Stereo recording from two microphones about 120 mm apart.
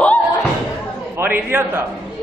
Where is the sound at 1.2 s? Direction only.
15° right (ahead or behind).